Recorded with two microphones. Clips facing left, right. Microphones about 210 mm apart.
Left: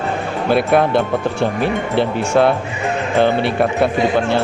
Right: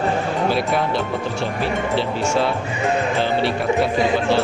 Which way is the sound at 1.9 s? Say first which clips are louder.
Left 6 dB; 55° left (ahead or behind).